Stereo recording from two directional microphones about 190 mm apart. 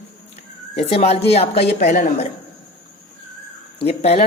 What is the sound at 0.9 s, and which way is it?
A woman's voice, 30° left (ahead or behind).